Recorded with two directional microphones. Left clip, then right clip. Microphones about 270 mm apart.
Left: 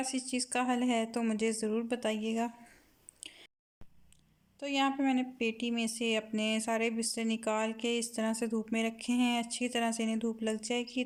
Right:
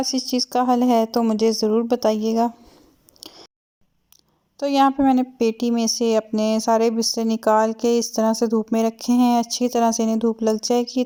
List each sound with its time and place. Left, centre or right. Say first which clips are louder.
0.1 s a woman's voice: right 13 dB; right
3.2 s chewing: right 8 dB; right
4.6 s a woman's voice: right 14 dB; right